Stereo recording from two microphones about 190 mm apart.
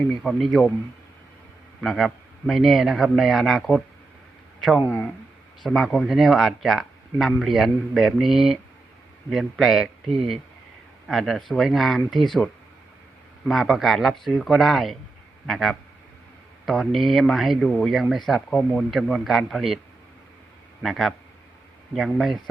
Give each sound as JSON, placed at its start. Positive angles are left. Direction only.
{"t": 0.2, "sound": "speech", "side_deg": 0}
{"t": 1.8, "sound": "speech", "side_deg": 0}
{"t": 5.6, "sound": "speech", "side_deg": 0}
{"t": 11.1, "sound": "speech", "side_deg": 0}
{"t": 20.8, "sound": "speech", "side_deg": 0}